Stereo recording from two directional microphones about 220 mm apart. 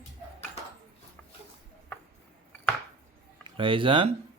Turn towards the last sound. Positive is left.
turn(degrees=-25)  # may be behind; listen again after turning